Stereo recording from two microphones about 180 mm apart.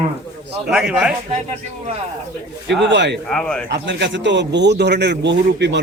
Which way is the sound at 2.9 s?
80° right.